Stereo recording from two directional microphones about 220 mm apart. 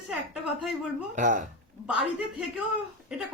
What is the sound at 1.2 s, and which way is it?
Speech, 35° right (ahead or behind).